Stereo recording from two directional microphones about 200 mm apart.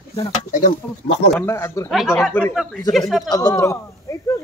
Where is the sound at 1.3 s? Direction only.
10° left (ahead or behind).